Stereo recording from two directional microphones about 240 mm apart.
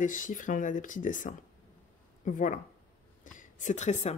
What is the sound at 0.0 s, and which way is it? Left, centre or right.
Speech, left.